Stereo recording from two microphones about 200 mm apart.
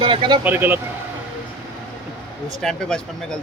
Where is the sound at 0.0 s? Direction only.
25° right (ahead or behind).